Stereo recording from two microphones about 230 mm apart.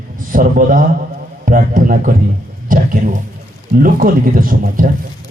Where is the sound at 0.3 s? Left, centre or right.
Right.